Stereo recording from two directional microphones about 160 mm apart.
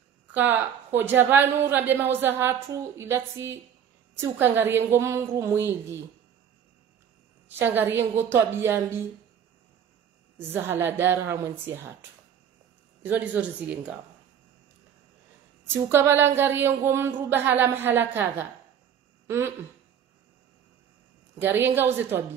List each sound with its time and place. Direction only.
0.3 s a woman's voice: 10° right (ahead or behind)
7.5 s a woman's voice: 15° right (ahead or behind)
10.4 s a woman's voice: 15° right (ahead or behind)
13.0 s a woman's voice: 10° right (ahead or behind)
15.7 s a woman's voice: 15° right (ahead or behind)
19.2 s speech: 15° right (ahead or behind)
21.4 s a woman's voice: 15° right (ahead or behind)